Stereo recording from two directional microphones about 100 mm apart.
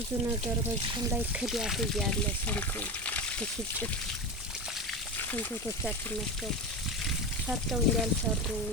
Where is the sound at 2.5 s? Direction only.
15° left (ahead or behind).